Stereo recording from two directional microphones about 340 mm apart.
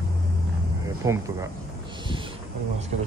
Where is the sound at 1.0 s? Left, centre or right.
Centre.